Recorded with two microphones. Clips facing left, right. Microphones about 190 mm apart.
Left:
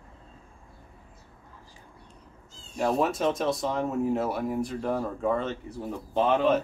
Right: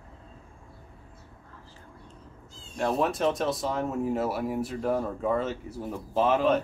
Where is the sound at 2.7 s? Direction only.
Centre (ahead or behind).